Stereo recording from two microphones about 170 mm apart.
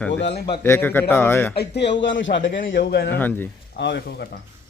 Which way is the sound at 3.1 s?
10° left (ahead or behind).